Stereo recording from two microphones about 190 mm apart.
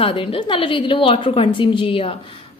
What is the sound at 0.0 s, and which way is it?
Speech, 30° left (ahead or behind).